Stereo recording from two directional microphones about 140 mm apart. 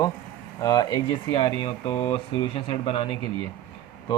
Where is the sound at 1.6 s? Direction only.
40° left (ahead or behind).